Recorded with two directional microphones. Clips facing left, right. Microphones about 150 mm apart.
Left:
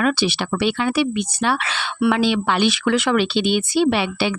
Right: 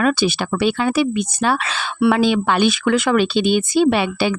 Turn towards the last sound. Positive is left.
turn(degrees=-45)  # may be behind; listen again after turning